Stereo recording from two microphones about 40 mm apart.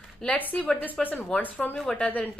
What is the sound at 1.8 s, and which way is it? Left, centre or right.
Speech, left.